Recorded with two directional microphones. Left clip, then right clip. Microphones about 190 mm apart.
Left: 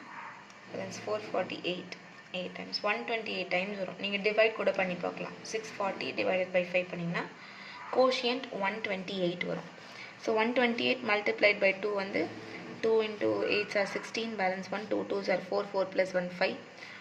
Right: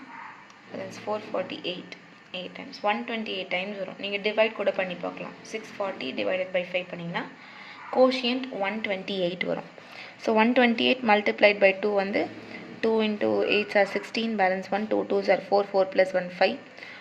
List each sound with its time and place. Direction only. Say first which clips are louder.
1.1 s a woman's voice: right 3 dB; 15° right (ahead or behind)